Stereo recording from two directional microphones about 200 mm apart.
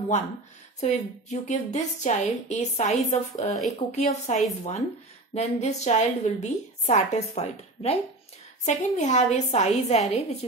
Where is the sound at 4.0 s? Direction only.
35° left (ahead or behind).